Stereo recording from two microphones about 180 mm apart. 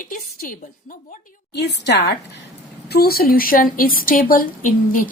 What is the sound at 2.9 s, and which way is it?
A woman's voice, 60° left (ahead or behind).